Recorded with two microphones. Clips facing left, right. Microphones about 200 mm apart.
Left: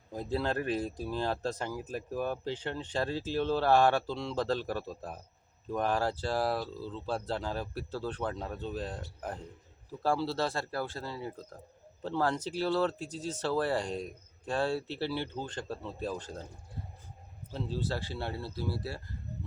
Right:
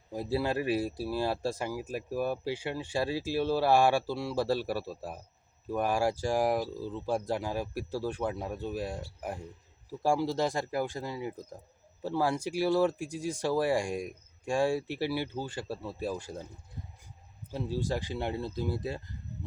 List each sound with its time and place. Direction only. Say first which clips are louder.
0.1 s speech: right 2 dB; 10° right (ahead or behind)
17.5 s speech: right 3 dB; 10° right (ahead or behind)